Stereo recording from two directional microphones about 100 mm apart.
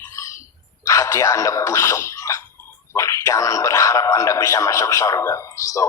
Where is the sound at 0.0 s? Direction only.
30° left (ahead or behind).